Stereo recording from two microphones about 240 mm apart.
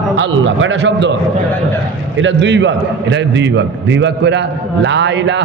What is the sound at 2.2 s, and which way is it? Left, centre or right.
Mantra, right.